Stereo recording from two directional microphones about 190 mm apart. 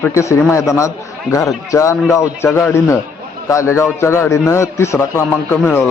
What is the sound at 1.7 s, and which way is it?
Speech, 15° left (ahead or behind).